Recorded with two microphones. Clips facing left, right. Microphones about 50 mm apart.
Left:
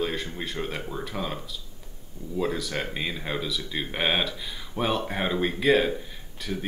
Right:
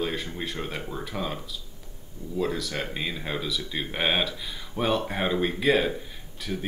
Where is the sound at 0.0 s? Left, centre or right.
Centre.